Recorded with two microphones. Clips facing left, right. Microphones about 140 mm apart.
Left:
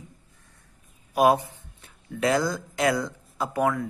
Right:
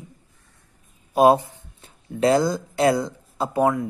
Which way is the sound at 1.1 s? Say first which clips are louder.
Right 4 dB; 30° right (ahead or behind).